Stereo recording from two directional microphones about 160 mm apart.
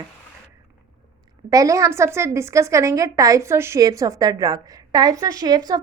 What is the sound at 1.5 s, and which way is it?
A woman's voice, 20° right (ahead or behind).